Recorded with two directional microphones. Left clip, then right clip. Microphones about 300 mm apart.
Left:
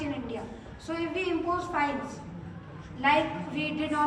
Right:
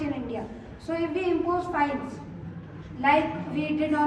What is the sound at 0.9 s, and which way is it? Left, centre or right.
Speech, centre.